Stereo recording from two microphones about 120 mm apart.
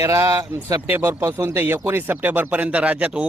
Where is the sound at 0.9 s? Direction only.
15° right (ahead or behind).